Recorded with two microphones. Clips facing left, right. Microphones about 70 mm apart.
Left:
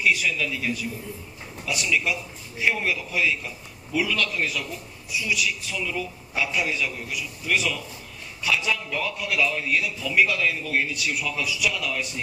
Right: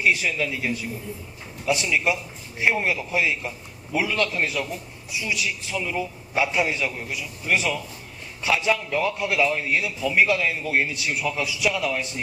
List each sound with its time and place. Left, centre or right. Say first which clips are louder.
0.0 s a man's voice: right 1 dB; right